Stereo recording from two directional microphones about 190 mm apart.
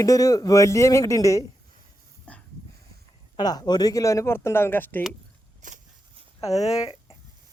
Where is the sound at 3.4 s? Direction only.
20° left (ahead or behind).